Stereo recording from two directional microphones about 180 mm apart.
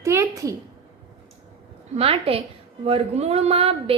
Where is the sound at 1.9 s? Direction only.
30° right (ahead or behind).